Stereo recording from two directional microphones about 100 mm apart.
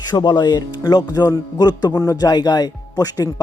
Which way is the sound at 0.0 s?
45° left (ahead or behind).